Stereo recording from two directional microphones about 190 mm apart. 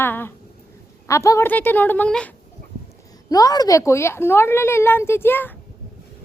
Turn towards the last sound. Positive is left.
turn(degrees=10)  # may be behind; listen again after turning